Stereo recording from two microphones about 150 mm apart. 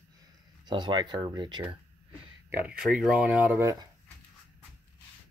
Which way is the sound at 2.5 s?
10° right (ahead or behind).